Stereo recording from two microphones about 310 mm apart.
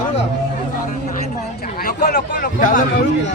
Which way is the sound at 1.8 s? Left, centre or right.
Left.